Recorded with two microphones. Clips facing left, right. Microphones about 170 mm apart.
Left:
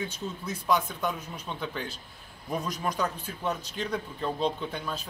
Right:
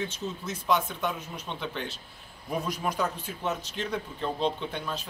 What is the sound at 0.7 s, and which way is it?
A man's voice, centre (ahead or behind).